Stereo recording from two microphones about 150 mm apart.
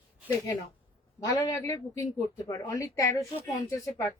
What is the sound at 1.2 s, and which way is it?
A woman's voice, 20° left (ahead or behind).